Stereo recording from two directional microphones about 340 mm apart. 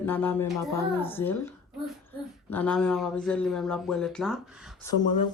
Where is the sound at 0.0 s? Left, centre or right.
Centre.